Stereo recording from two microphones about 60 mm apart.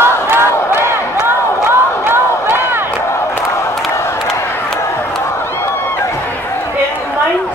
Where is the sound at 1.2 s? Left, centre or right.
Right.